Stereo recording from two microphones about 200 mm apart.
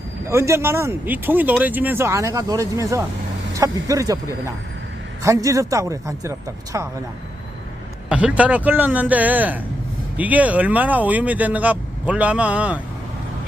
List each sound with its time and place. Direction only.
0.3 s speech: 15° right (ahead or behind)
5.2 s speech: 15° right (ahead or behind)
8.1 s speech: 5° right (ahead or behind)